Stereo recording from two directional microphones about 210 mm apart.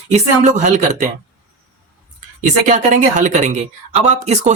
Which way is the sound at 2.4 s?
35° right (ahead or behind).